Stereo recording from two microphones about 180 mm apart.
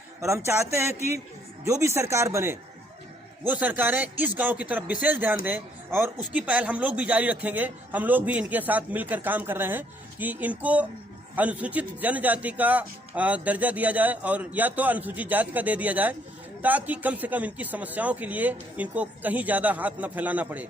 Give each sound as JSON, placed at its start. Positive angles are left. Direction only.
{"t": 0.2, "sound": "speech", "side_deg": -15}